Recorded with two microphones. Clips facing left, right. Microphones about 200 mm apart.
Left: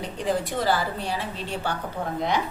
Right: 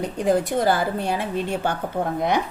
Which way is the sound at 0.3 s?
50° right (ahead or behind).